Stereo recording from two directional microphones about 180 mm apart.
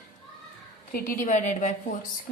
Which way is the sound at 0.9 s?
50° left (ahead or behind).